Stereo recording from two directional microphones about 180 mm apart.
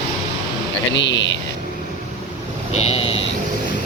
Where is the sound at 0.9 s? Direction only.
80° left.